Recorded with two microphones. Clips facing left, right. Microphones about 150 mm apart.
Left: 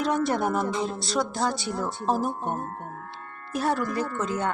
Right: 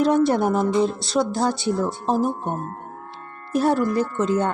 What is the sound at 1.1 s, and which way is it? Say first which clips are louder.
Speech: right 3 dB; 25° right (ahead or behind).